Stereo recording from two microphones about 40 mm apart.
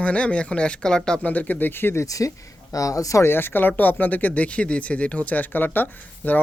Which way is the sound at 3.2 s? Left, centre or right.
Left.